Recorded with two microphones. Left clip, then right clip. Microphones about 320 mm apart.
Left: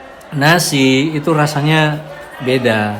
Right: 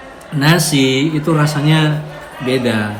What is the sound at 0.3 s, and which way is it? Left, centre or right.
Speech, left.